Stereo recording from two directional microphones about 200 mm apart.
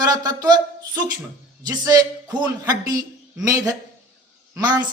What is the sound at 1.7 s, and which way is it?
A woman's voice, 20° right (ahead or behind).